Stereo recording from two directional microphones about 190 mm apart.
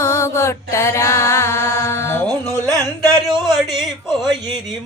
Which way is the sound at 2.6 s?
20° right (ahead or behind).